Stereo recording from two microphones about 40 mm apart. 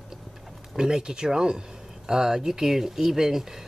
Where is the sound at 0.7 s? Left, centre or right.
Centre.